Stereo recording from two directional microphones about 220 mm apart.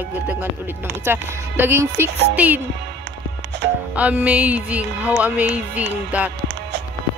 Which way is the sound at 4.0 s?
5° right (ahead or behind).